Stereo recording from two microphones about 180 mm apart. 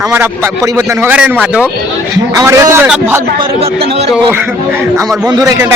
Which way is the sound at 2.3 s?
20° right (ahead or behind).